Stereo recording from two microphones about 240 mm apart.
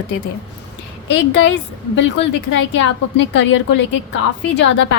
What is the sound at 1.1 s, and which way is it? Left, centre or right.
A woman's voice, left.